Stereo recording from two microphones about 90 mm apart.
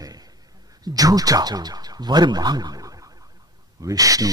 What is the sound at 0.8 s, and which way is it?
A man's voice, 45° right (ahead or behind).